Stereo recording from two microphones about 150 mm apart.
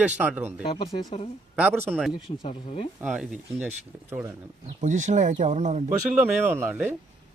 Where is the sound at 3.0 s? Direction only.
5° right (ahead or behind).